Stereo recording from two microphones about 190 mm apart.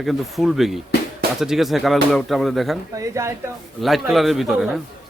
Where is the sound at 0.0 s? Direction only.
Centre (ahead or behind).